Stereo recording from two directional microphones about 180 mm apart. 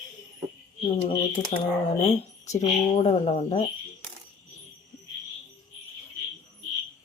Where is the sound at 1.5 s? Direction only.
40° left (ahead or behind).